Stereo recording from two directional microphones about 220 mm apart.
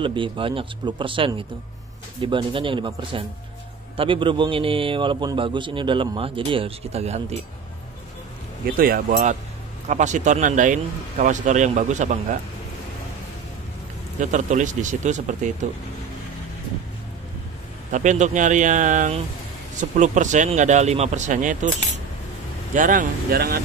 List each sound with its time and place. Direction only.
0.0 s a man's voice: 20° right (ahead or behind)
8.7 s speech: 40° right (ahead or behind)
14.2 s speech: 35° right (ahead or behind)
17.9 s speech: 35° right (ahead or behind)
22.8 s speech: 40° right (ahead or behind)